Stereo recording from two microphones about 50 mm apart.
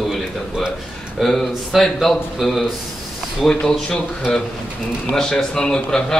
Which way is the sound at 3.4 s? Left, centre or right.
Centre.